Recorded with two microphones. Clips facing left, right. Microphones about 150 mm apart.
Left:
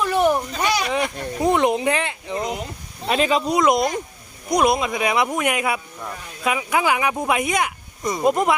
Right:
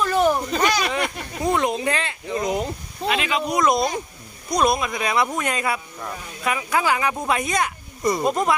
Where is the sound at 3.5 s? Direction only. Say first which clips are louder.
Even; 20° left (ahead or behind).